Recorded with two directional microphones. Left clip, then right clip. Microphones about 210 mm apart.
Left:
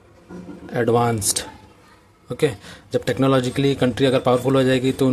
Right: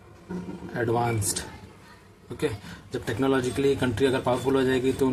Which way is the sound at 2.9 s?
45° left (ahead or behind).